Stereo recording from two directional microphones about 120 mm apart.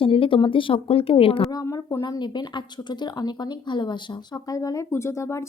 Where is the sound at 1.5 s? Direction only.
30° left (ahead or behind).